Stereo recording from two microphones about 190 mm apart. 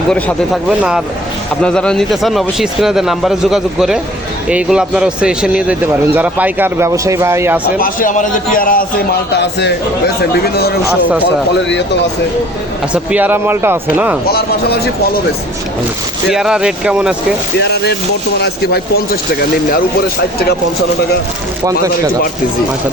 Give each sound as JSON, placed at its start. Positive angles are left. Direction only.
{"t": 0.1, "sound": "a man's voice", "side_deg": 0}
{"t": 7.8, "sound": "a man's voice", "side_deg": 45}
{"t": 9.3, "sound": "speech", "side_deg": 65}
{"t": 12.9, "sound": "a man's voice", "side_deg": -5}
{"t": 16.3, "sound": "speech", "side_deg": -5}
{"t": 17.6, "sound": "speech", "side_deg": 60}